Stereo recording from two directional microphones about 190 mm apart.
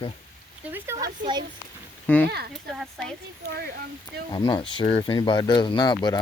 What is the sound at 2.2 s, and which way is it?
Speech, 55° right (ahead or behind).